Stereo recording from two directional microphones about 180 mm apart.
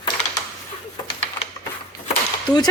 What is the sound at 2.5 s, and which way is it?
Speech, 20° left (ahead or behind).